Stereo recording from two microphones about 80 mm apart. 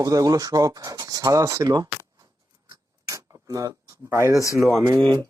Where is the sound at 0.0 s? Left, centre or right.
Right.